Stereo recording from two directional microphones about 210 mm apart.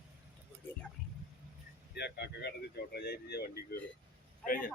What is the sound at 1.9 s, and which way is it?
Speech, 50° left (ahead or behind).